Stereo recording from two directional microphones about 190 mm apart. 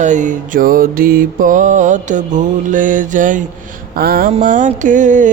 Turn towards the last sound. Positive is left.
turn(degrees=-40)  # may be behind; listen again after turning